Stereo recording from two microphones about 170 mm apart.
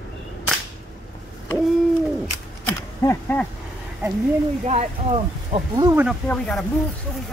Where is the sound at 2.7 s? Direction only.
10° left (ahead or behind).